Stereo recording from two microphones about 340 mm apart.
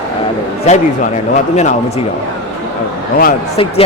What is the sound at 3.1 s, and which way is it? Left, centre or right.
Speech, left.